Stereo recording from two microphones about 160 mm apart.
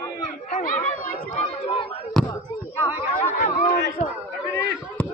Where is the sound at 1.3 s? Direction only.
35° left (ahead or behind).